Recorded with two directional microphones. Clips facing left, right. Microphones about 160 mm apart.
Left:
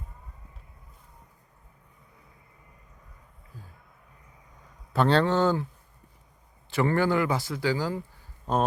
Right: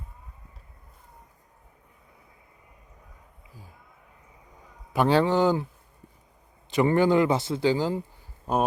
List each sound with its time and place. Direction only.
4.9 s speech: 10° right (ahead or behind)
6.7 s a man's voice: 20° right (ahead or behind)